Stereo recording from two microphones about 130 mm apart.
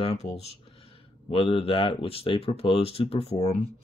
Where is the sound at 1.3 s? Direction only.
45° left (ahead or behind).